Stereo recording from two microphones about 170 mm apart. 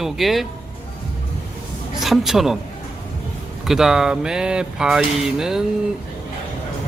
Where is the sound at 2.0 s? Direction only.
Centre (ahead or behind).